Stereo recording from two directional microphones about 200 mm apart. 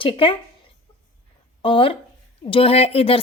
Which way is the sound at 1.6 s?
25° left (ahead or behind).